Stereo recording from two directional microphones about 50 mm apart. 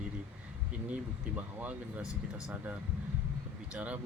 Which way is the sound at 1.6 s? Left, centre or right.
Right.